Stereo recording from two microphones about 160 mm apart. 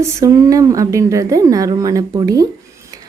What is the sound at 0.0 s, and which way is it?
A woman's voice, 20° right (ahead or behind).